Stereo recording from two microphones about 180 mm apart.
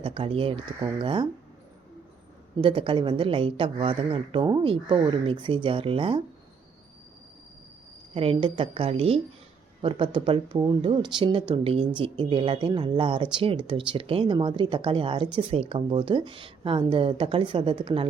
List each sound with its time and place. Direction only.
0.0 s speech: 30° right (ahead or behind)
2.6 s speech: 30° right (ahead or behind)
8.1 s a woman's voice: 30° right (ahead or behind)